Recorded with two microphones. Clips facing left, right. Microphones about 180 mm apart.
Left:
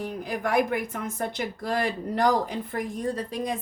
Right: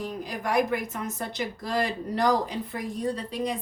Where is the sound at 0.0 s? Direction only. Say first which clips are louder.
Left 2 dB; 55° left (ahead or behind).